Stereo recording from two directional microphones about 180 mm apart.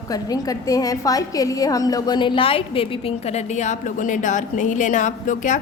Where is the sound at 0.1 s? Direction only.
20° left (ahead or behind).